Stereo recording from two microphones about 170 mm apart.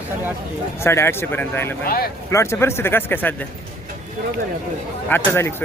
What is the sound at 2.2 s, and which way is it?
Speech, 15° left (ahead or behind).